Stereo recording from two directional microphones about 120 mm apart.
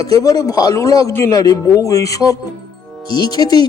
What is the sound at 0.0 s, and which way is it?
A man's voice, 30° left (ahead or behind).